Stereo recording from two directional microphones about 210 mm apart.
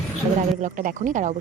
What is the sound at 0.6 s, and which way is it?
Speech, 35° right (ahead or behind).